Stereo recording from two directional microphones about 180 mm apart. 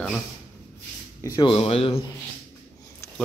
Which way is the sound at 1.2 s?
25° left (ahead or behind).